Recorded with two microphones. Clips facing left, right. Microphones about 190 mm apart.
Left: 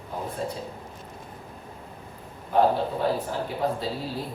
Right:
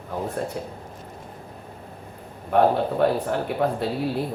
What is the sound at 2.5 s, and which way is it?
Speech, 65° right (ahead or behind).